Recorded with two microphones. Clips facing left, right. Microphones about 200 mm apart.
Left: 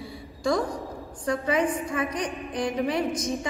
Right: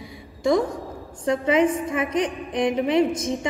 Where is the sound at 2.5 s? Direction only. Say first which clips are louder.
Right 6 dB; 20° right (ahead or behind).